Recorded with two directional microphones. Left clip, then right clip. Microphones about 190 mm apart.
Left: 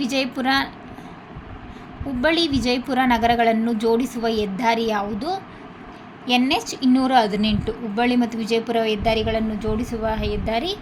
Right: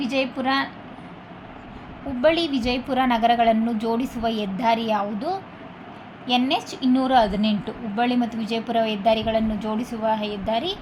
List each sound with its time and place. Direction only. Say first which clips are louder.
0.0 s a woman's voice: left 1 dB; 15° left (ahead or behind)
2.2 s a woman's voice: even; 15° left (ahead or behind)